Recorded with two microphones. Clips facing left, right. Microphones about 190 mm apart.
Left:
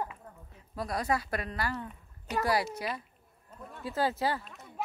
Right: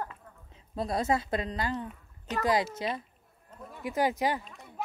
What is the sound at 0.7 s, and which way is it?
A woman's voice, 25° right (ahead or behind).